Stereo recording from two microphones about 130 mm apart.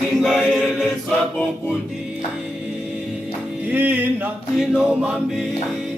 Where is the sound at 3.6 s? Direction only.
15° right (ahead or behind).